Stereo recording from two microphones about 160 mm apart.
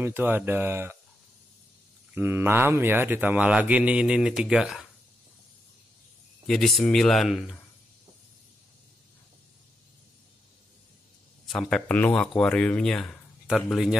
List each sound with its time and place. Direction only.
0.0 s speech: 15° right (ahead or behind)
2.1 s speech: 15° right (ahead or behind)
6.4 s speech: 5° left (ahead or behind)
11.4 s speech: centre (ahead or behind)